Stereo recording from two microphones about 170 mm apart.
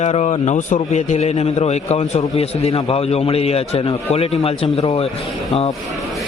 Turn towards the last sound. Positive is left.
turn(degrees=35)  # may be behind; listen again after turning